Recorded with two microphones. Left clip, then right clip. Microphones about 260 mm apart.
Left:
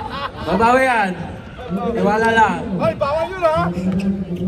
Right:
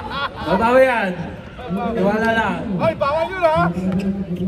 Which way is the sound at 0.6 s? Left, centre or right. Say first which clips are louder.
Left 1 dB; left.